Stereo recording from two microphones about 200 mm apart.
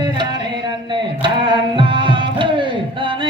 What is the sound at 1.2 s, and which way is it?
Music, 25° right (ahead or behind).